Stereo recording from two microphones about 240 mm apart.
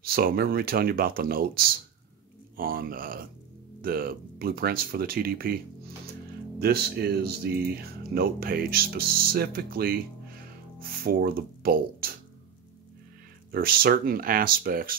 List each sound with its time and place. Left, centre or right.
0.0 s speech: right
6.6 s speech: right
13.5 s speech: right